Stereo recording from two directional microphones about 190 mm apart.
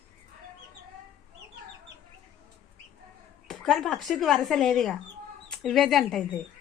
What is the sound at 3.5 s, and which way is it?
Speech, centre (ahead or behind).